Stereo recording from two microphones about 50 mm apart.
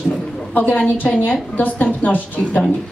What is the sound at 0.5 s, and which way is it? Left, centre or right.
A woman's voice, left.